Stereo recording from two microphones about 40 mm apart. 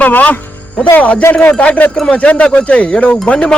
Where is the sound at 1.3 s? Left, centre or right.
Left.